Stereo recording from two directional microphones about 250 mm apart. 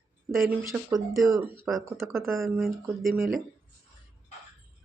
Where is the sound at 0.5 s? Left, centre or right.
Centre.